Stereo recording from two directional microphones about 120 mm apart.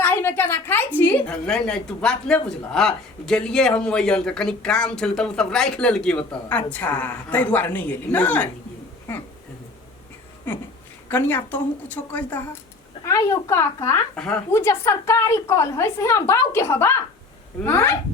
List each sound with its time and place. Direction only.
0.0 s a sound: 15° left (ahead or behind)
1.5 s speech: 5° left (ahead or behind)
11.1 s speech: 15° left (ahead or behind)
13.1 s a woman's voice: 25° left (ahead or behind)
14.2 s speech: 5° left (ahead or behind)
14.5 s a woman's voice: 20° left (ahead or behind)